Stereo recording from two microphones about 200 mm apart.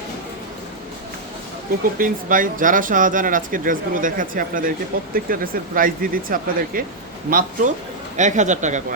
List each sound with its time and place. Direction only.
2.0 s speech: 45° right (ahead or behind)